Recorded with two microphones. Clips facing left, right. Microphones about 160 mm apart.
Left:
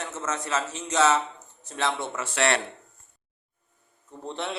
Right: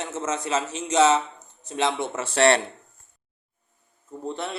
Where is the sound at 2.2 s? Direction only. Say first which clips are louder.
Right 7 dB; 30° right (ahead or behind).